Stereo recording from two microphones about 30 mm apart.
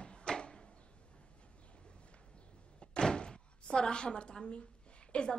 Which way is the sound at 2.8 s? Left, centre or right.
Left.